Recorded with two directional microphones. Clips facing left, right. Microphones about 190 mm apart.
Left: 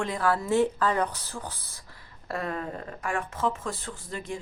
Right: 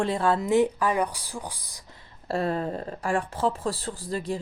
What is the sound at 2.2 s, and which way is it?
Speech, 30° right (ahead or behind).